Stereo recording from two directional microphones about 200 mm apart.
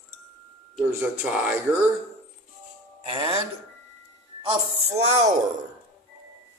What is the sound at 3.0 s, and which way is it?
Doorbell, 25° right (ahead or behind).